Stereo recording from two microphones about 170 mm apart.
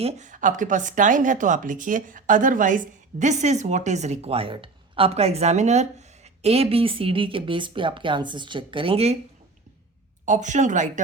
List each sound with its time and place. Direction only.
0.0 s a woman's voice: 45° right (ahead or behind)
10.2 s a woman's voice: 45° right (ahead or behind)